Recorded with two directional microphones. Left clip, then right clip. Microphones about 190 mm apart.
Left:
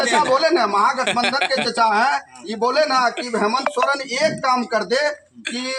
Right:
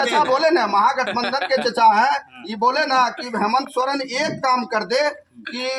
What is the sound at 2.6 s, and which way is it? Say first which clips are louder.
Speech: even; 15° right (ahead or behind).